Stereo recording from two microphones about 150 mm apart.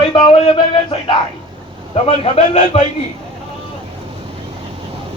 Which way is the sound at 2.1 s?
40° left (ahead or behind).